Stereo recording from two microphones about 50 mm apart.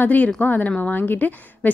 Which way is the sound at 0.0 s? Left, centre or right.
Left.